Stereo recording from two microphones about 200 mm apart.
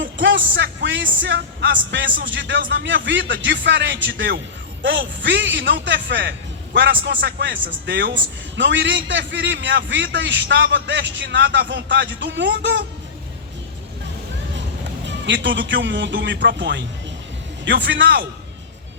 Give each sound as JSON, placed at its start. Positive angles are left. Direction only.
{"t": 0.0, "sound": "music", "side_deg": -65}
{"t": 2.3, "sound": "a man's voice", "side_deg": -65}
{"t": 15.0, "sound": "a man's voice", "side_deg": -65}